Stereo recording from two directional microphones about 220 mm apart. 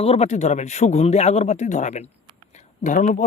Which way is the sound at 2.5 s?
35° left (ahead or behind).